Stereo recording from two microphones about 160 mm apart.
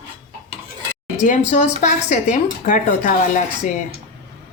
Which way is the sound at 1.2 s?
50° left (ahead or behind).